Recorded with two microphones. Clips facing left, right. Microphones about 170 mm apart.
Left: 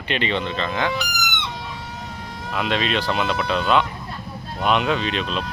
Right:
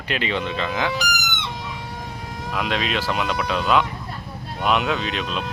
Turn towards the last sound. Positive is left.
turn(degrees=-5)  # may be behind; listen again after turning